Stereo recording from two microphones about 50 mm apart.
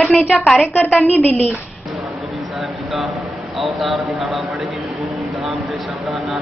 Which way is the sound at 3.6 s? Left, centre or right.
Centre.